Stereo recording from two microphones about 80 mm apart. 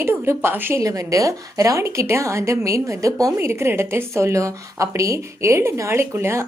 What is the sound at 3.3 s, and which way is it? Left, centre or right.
A woman's voice, right.